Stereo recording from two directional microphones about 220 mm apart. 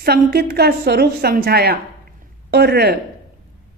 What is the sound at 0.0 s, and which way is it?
A woman's voice, 45° right (ahead or behind).